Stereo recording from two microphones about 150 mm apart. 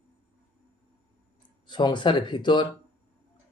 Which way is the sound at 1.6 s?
30° left (ahead or behind).